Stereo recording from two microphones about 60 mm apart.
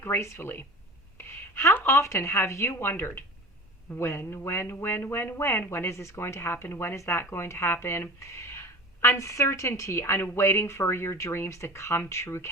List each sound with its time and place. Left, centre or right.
0.0 s speech: left